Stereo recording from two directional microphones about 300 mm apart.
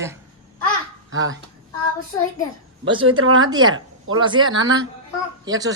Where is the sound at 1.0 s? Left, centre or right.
Right.